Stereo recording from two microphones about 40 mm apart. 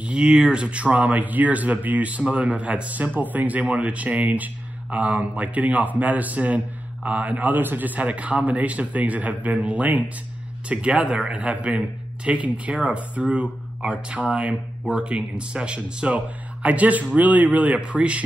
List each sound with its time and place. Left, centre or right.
0.2 s a man's voice: centre
16.6 s a man's voice: right